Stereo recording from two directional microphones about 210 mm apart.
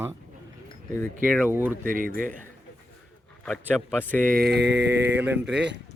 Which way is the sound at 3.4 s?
5° left (ahead or behind).